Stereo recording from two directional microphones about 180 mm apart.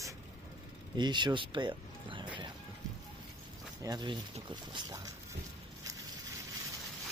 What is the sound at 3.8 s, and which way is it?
Speech, 25° right (ahead or behind).